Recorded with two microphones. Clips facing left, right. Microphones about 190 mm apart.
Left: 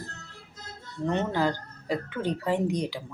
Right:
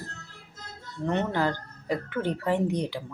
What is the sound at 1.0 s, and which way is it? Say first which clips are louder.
Speech: even; 15° left (ahead or behind).